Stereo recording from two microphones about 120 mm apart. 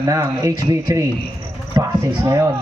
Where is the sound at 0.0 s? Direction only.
30° right (ahead or behind).